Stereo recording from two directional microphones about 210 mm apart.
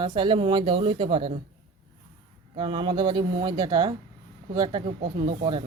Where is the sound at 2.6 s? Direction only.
25° right (ahead or behind).